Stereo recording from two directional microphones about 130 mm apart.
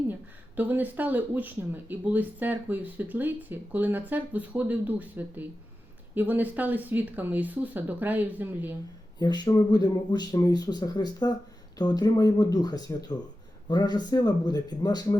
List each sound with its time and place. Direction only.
0.1 s speech: 15° right (ahead or behind)
9.1 s speech: 35° left (ahead or behind)